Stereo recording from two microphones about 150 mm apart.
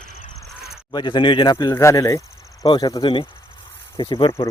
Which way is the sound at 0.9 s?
30° left (ahead or behind).